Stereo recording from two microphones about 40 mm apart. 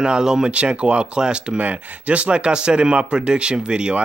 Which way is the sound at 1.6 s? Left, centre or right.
Right.